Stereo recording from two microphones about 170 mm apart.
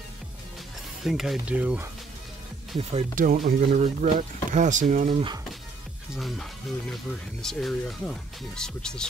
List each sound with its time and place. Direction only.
1.0 s speech: centre (ahead or behind)
2.8 s speech: 35° right (ahead or behind)
3.2 s speech: 55° right (ahead or behind)
6.1 s speech: centre (ahead or behind)
7.4 s speech: centre (ahead or behind)